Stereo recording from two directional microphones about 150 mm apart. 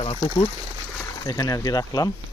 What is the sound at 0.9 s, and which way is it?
Speech, 25° left (ahead or behind).